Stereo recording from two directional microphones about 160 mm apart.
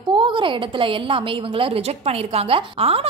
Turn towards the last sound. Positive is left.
turn(degrees=-35)  # may be behind; listen again after turning